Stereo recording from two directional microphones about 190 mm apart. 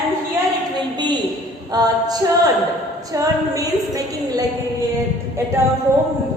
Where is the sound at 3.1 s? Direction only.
20° right (ahead or behind).